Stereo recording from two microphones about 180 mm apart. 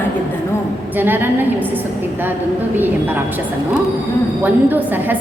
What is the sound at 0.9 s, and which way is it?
Speech, 10° right (ahead or behind).